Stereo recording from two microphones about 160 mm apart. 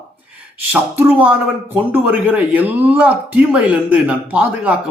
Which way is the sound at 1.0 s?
10° right (ahead or behind).